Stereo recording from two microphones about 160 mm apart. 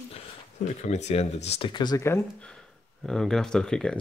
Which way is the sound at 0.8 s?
45° left (ahead or behind).